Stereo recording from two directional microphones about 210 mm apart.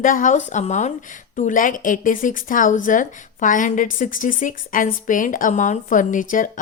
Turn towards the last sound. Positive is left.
turn(degrees=40)  # may be behind; listen again after turning